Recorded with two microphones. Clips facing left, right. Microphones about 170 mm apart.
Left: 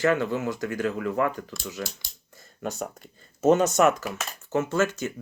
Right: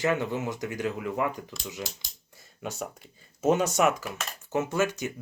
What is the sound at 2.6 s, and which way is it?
Speech, 5° right (ahead or behind).